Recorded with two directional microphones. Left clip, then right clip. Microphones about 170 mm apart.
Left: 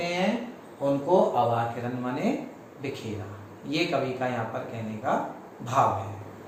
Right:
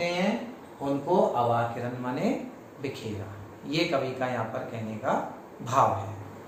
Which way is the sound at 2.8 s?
25° right (ahead or behind).